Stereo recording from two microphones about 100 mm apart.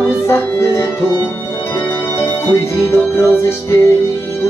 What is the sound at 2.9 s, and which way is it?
Music, 25° left (ahead or behind).